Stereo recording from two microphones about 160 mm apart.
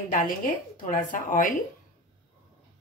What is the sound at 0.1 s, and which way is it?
Speech, 60° left (ahead or behind).